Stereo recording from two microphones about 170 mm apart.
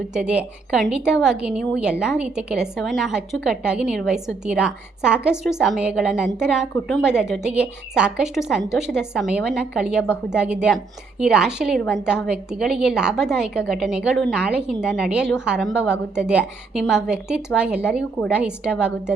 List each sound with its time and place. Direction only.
0.1 s a woman's voice: 5° right (ahead or behind)